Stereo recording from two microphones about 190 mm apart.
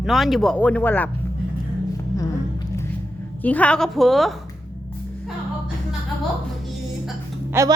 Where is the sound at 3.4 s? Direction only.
5° left (ahead or behind).